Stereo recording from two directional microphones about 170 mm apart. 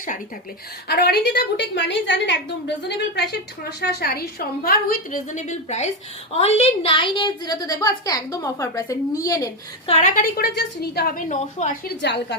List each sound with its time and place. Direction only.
0.9 s a woman's voice: 70° left (ahead or behind); by 2.7 s 90° left
3.2 s a woman's voice: 75° left (ahead or behind); by 9.5 s 20° left (ahead or behind)
9.8 s a woman's voice: 35° left (ahead or behind)
10.1 s a woman's voice: 55° left (ahead or behind)